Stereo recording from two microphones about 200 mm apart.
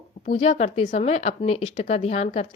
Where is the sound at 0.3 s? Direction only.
35° left (ahead or behind).